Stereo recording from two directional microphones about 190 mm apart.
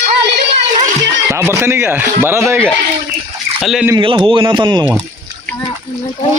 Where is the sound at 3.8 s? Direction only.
25° right (ahead or behind).